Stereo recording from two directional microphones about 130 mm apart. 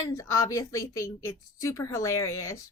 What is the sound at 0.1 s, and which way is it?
A woman's voice, 25° left (ahead or behind).